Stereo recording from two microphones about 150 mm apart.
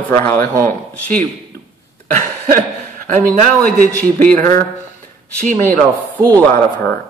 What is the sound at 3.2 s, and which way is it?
Speech, 70° right (ahead or behind).